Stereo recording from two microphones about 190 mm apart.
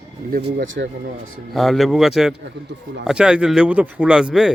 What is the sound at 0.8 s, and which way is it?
Speech, 55° right (ahead or behind).